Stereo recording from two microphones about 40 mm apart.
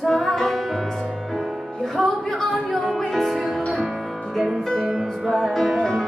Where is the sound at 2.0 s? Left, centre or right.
Centre.